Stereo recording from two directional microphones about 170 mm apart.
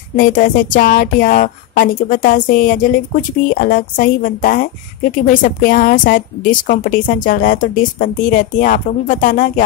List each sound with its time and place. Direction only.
0.1 s speech: 55° left (ahead or behind)